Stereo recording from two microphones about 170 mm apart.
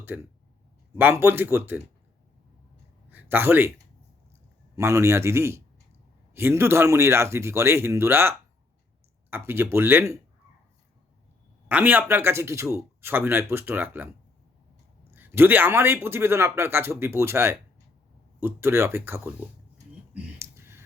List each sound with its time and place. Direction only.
0.0 s a man's voice: 15° right (ahead or behind)
3.1 s speech: 10° right (ahead or behind)
4.7 s a man's voice: 15° right (ahead or behind)
11.7 s a man's voice: 10° right (ahead or behind)
15.1 s a man's voice: 10° right (ahead or behind)
20.4 s a sound: 15° right (ahead or behind)